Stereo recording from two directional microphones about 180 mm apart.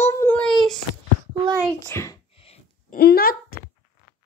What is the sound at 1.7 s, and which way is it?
Speech, 15° left (ahead or behind).